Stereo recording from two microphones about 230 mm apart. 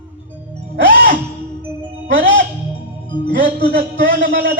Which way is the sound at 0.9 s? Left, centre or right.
Right.